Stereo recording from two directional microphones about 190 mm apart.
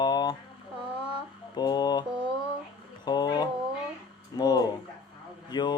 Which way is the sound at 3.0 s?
20° left (ahead or behind).